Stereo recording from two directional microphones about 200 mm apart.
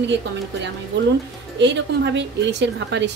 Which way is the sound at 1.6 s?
60° right (ahead or behind).